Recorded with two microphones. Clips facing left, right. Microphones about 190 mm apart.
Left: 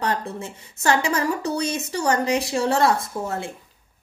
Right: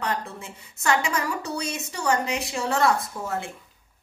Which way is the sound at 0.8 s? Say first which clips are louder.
Left 4 dB; 35° left (ahead or behind).